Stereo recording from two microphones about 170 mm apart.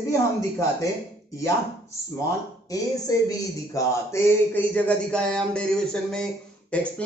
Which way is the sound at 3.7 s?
15° left (ahead or behind).